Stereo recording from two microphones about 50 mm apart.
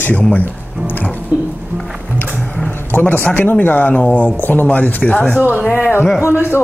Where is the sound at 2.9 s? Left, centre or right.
Left.